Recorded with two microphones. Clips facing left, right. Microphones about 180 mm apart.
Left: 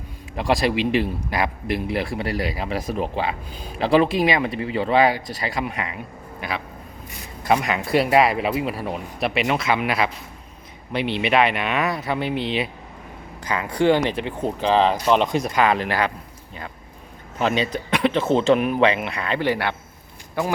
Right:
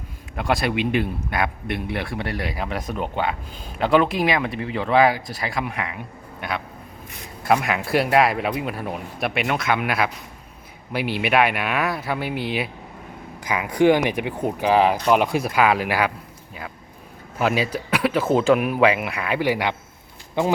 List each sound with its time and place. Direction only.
0.3 s speech: centre (ahead or behind)
2.8 s speech: 35° left (ahead or behind)
3.2 s speech: centre (ahead or behind)
7.4 s speech: centre (ahead or behind)
17.3 s speech: 5° right (ahead or behind)